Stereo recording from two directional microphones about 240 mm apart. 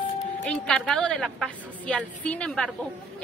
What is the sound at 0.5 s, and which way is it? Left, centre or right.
A woman's voice, centre.